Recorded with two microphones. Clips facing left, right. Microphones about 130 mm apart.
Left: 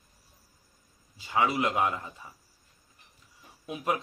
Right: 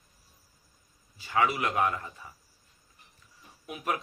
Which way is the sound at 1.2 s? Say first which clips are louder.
Left 1 dB; 20° left (ahead or behind).